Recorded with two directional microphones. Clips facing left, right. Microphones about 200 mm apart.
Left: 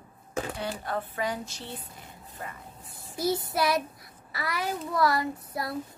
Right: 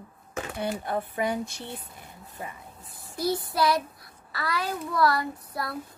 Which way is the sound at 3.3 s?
25° left (ahead or behind).